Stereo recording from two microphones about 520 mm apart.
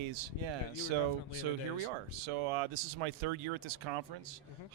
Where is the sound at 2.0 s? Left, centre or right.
Right.